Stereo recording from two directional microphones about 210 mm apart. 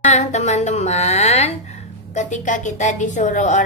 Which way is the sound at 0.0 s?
35° left (ahead or behind).